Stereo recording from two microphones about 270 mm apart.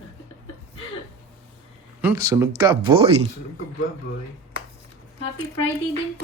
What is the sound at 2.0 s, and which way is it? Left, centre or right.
Speech, centre.